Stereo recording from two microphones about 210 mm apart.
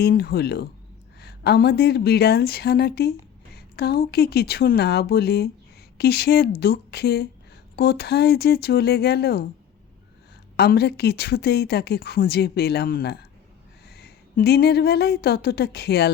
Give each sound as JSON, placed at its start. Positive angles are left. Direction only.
{"t": 0.0, "sound": "a woman's voice", "side_deg": 50}
{"t": 10.6, "sound": "a woman's voice", "side_deg": 50}